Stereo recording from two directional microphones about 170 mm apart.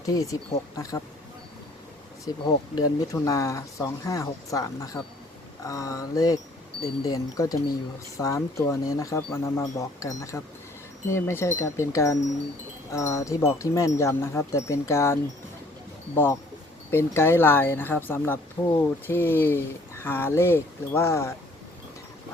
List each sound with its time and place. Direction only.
0.0 s speech: 20° left (ahead or behind)
2.3 s speech: 20° left (ahead or behind)
18.6 s speech: 25° left (ahead or behind)
19.0 s speech: 15° left (ahead or behind)